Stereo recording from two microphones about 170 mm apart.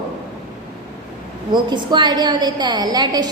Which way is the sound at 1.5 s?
25° right (ahead or behind).